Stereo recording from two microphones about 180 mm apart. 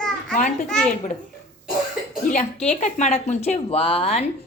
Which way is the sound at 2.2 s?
45° left (ahead or behind).